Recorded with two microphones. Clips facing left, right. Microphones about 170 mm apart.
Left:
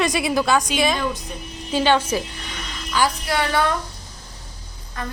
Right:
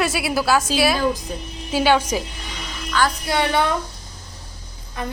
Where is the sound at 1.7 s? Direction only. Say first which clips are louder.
Right 1 dB; 10° right (ahead or behind).